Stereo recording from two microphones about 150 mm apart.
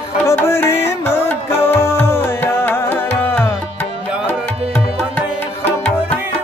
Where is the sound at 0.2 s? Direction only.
15° left (ahead or behind).